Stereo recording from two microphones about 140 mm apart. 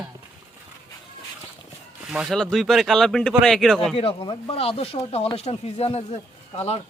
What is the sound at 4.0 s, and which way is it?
Speech, 40° left (ahead or behind).